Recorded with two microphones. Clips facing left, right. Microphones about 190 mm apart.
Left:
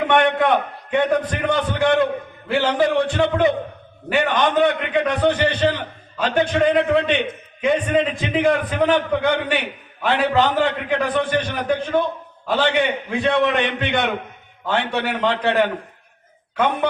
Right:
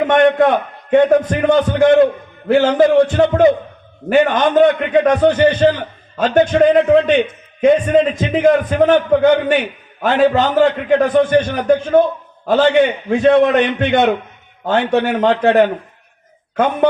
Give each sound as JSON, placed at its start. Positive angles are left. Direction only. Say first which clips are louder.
{"t": 0.0, "sound": "a man's voice", "louder": "right 6 dB", "side_deg": -45}